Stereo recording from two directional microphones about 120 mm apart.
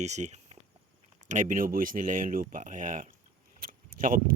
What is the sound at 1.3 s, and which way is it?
Speech, 90° right.